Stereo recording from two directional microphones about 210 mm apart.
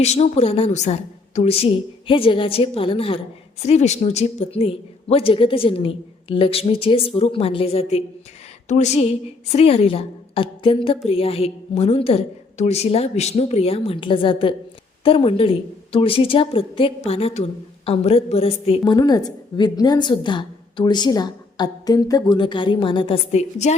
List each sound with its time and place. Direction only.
0.0 s a woman's voice: 30° left (ahead or behind)